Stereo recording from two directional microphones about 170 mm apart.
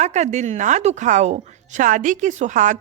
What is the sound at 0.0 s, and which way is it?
A woman's voice, 45° right (ahead or behind).